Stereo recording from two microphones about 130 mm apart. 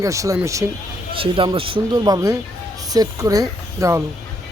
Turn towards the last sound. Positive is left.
turn(degrees=-25)  # may be behind; listen again after turning